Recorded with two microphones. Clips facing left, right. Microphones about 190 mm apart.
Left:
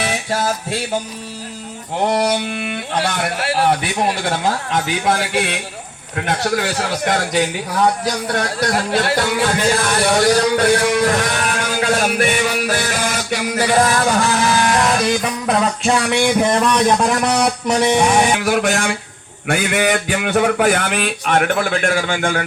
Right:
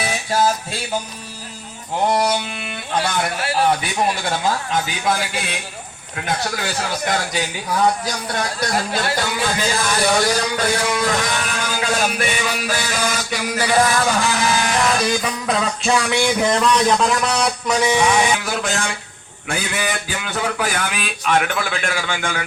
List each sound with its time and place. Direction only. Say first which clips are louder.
0.0 s music: right 1 dB; 65° left (ahead or behind)
2.0 s a man's voice: left 2 dB; 70° left (ahead or behind)
14.6 s a sound: left 3 dB; 50° left (ahead or behind)
16.6 s speech: left 2 dB; 50° left (ahead or behind)